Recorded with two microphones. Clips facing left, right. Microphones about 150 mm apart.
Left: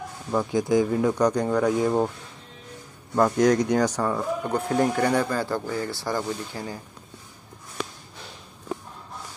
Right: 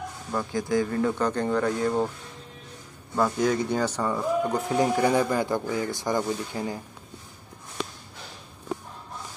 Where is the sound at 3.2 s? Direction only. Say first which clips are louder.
Left 4 dB; 5° right (ahead or behind).